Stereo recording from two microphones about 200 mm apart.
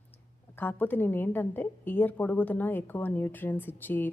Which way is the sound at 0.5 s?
10° left (ahead or behind).